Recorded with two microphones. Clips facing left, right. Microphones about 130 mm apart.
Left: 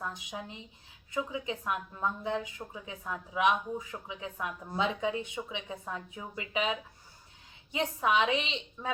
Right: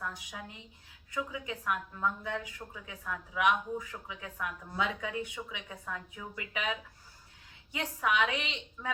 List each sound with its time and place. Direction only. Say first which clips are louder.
0.0 s a woman's voice: left 2 dB; 25° left (ahead or behind)